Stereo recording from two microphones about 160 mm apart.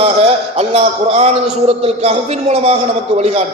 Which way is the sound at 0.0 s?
40° right (ahead or behind).